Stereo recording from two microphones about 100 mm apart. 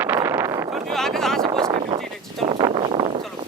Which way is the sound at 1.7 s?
60° right (ahead or behind).